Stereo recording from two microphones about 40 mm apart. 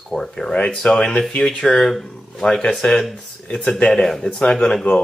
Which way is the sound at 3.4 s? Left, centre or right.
Left.